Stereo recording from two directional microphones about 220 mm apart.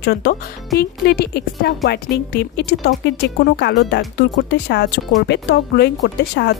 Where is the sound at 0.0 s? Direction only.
45° left (ahead or behind).